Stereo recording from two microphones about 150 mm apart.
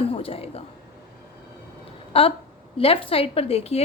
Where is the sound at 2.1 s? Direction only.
40° left (ahead or behind).